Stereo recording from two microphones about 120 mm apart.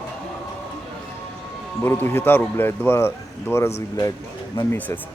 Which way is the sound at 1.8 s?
20° left (ahead or behind).